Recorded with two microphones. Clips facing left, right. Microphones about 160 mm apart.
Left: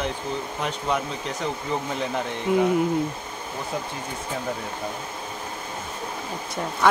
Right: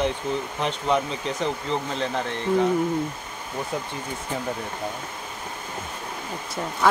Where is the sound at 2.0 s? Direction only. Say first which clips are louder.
Even; 15° left (ahead or behind).